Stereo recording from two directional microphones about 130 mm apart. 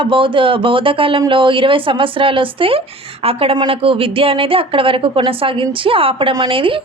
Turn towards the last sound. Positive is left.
turn(degrees=-40)  # may be behind; listen again after turning